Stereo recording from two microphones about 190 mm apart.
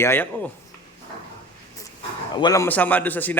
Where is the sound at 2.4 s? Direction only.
15° left (ahead or behind).